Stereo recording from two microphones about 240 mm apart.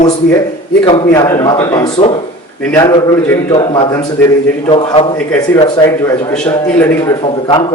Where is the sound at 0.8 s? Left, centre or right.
Centre.